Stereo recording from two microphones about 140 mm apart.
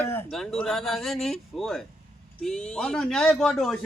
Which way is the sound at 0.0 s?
15° left (ahead or behind).